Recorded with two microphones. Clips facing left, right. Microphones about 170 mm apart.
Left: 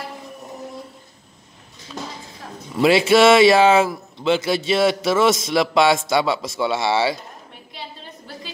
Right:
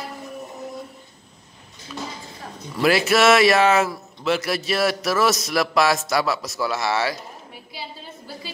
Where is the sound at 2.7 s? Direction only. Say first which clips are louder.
Left 4 dB; 25° left (ahead or behind).